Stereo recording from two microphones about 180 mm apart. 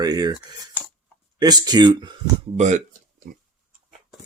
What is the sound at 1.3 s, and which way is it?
Speech, 20° right (ahead or behind).